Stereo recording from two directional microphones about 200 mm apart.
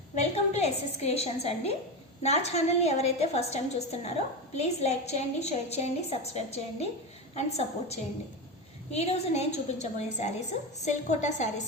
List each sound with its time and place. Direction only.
0.2 s a woman's voice: 35° left (ahead or behind)